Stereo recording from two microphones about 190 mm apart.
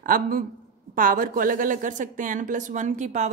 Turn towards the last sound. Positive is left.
turn(degrees=-40)  # may be behind; listen again after turning